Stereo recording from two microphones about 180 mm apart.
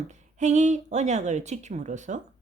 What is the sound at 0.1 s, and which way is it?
A woman's voice, 40° right (ahead or behind).